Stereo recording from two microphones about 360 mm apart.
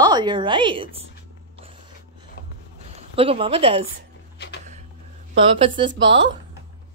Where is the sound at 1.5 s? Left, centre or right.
Centre.